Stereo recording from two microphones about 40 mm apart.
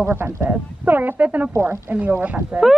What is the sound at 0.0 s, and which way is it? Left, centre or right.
Speech, right.